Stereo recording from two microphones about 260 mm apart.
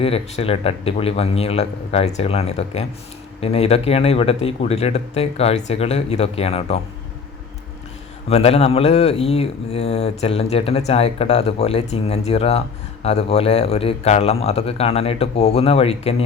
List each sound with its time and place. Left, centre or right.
0.0 s speech: left
8.3 s speech: left